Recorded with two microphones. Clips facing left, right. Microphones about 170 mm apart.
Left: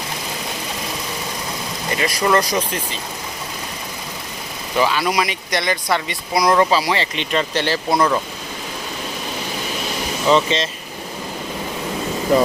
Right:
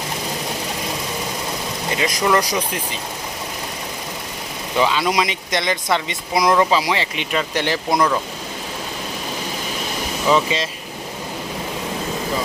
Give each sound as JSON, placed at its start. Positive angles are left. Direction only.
{"t": 2.0, "sound": "speech", "side_deg": -20}
{"t": 4.9, "sound": "speech", "side_deg": -20}
{"t": 7.9, "sound": "speech", "side_deg": 5}
{"t": 10.2, "sound": "speech", "side_deg": -5}